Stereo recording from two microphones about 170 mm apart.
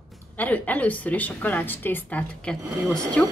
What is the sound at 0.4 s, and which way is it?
A woman's voice, 10° left (ahead or behind).